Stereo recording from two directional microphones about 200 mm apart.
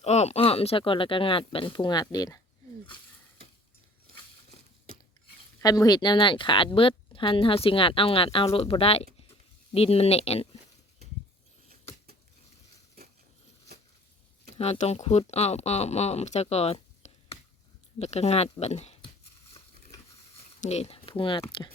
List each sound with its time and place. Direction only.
0.0 s speech: 35° left (ahead or behind)
5.5 s speech: 15° left (ahead or behind)
14.5 s speech: 35° left (ahead or behind)
20.6 s speech: 30° left (ahead or behind)